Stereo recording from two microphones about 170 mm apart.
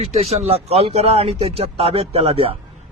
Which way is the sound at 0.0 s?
35° right (ahead or behind).